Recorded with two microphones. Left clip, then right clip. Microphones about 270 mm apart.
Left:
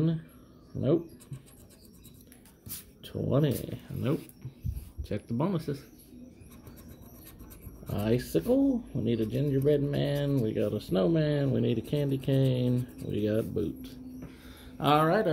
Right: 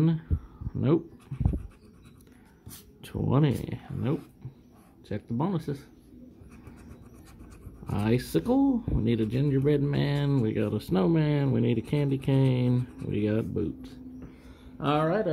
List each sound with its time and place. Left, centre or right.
0.7 s speech: right
3.0 s speech: right
5.0 s speech: centre
7.8 s speech: centre
14.8 s speech: centre